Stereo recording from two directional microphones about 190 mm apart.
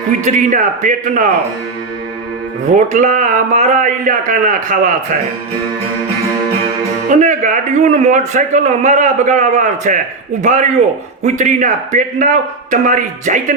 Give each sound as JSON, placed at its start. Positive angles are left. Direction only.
{"t": 0.3, "sound": "a man's voice", "side_deg": -40}
{"t": 2.7, "sound": "a man's voice", "side_deg": -40}
{"t": 7.1, "sound": "a man's voice", "side_deg": -40}